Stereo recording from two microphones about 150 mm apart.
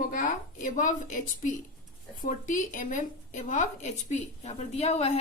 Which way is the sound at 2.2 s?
60° left (ahead or behind).